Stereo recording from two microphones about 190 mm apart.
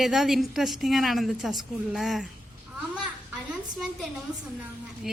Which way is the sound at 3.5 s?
Centre (ahead or behind).